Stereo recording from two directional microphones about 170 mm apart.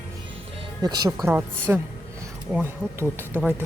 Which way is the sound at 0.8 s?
25° right (ahead or behind).